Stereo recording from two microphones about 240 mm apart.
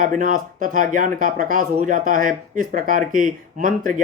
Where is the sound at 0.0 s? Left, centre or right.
Right.